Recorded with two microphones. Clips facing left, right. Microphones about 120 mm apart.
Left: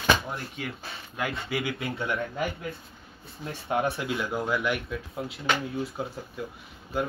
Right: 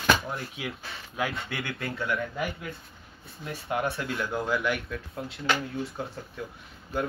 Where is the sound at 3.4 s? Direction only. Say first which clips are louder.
Left 2 dB; 25° left (ahead or behind).